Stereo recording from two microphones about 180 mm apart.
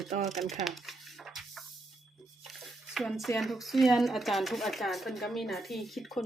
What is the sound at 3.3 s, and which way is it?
Speech, centre (ahead or behind).